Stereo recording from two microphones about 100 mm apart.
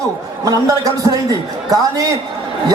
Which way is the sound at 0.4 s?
35° right (ahead or behind).